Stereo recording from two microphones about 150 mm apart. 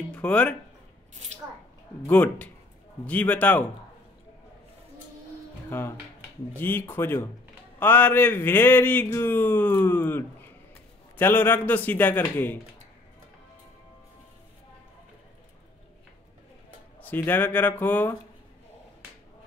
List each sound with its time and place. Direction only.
0.1 s speech: 10° left (ahead or behind)
2.0 s speech: 10° left (ahead or behind)
5.7 s speech: 15° left (ahead or behind)
17.0 s speech: 15° left (ahead or behind)